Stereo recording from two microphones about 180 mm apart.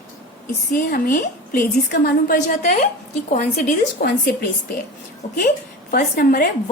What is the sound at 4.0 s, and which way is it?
Speech, 60° left (ahead or behind).